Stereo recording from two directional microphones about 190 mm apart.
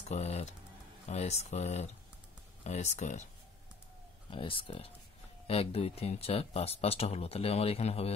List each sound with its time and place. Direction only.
0.0 s speech: 35° left (ahead or behind)
4.3 s speech: 25° left (ahead or behind)